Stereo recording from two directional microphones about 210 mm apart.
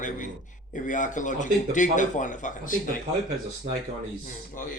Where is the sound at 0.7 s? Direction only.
35° left (ahead or behind).